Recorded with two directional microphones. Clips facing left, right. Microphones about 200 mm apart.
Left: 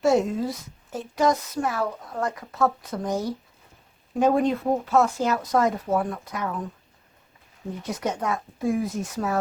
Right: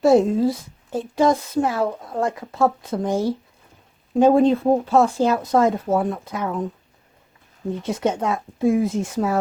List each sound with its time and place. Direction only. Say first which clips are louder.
0.0 s a woman's voice: right 6 dB; 35° right (ahead or behind)
7.8 s a woman's voice: right 5 dB; 25° right (ahead or behind)